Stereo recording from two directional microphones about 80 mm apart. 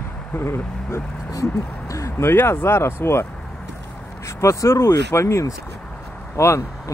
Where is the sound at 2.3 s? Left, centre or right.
Left.